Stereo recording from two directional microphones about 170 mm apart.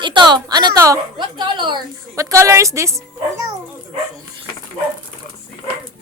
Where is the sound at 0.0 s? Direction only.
25° right (ahead or behind).